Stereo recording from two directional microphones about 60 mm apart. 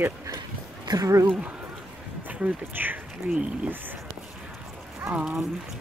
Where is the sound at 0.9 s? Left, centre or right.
Right.